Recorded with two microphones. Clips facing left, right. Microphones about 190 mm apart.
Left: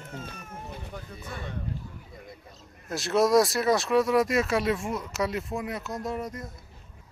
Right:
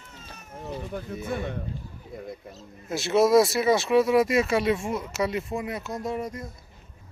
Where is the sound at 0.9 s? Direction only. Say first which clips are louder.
Right 9 dB; 50° right (ahead or behind).